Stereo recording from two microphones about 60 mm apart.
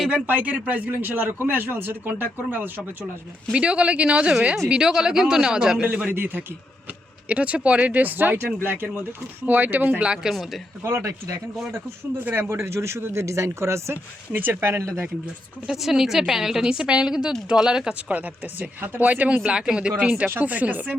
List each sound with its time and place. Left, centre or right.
0.1 s a man's voice: right
3.5 s speech: centre
6.1 s a man's voice: right
7.3 s a man's voice: right
10.2 s speech: centre
10.8 s speech: right
12.2 s speech: right
13.9 s a man's voice: right
15.6 s speech: centre
18.1 s speech: right
19.4 s speech: centre